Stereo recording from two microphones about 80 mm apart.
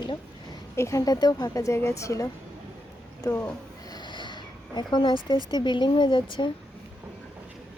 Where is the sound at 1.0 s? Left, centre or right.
Left.